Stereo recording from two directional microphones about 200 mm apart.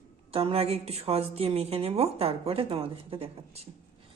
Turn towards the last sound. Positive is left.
turn(degrees=-30)  # may be behind; listen again after turning